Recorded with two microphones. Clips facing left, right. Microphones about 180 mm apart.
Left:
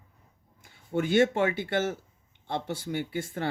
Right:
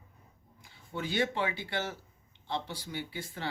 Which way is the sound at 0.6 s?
50° left (ahead or behind).